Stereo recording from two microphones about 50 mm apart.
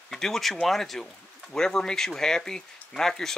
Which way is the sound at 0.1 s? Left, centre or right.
Centre.